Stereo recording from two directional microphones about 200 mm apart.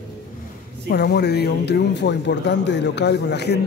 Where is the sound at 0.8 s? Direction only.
55° left (ahead or behind).